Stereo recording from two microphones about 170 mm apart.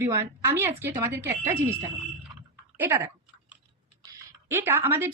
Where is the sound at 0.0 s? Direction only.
15° right (ahead or behind).